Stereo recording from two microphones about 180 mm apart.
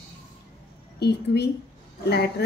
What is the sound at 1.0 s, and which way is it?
Speech, 65° left (ahead or behind).